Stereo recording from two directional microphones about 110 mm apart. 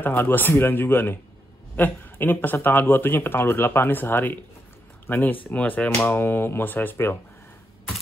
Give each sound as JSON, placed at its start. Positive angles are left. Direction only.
{"t": 0.0, "sound": "speech", "side_deg": 20}